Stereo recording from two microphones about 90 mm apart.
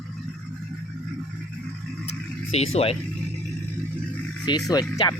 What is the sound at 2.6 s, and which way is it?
Speech, 90° left.